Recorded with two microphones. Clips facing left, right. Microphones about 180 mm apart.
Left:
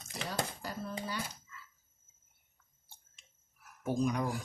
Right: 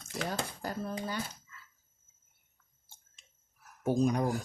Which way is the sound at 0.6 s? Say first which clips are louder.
Right 4 dB; 45° right (ahead or behind).